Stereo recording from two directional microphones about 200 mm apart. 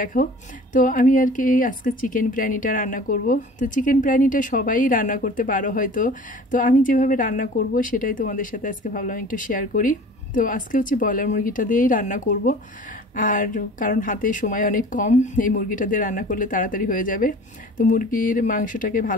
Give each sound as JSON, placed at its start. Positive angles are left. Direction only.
{"t": 0.0, "sound": "speech", "side_deg": 45}